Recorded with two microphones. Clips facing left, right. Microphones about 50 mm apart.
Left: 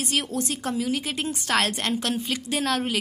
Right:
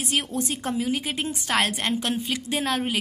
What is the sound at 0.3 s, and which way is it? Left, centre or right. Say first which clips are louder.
A woman's voice: even; right.